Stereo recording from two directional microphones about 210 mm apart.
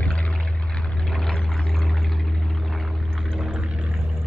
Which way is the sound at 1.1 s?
5° left (ahead or behind).